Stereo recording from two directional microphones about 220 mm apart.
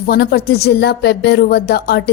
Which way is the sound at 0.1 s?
45° left (ahead or behind).